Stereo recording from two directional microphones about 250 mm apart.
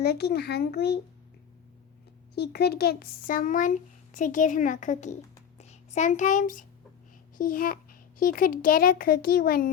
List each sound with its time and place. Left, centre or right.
0.0 s a child's voice: left
2.3 s a child's voice: left